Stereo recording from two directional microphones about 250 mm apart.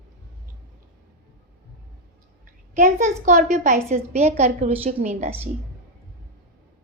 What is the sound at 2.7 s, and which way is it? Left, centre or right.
A woman's voice, right.